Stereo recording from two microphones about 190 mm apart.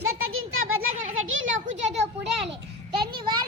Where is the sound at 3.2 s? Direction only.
25° right (ahead or behind).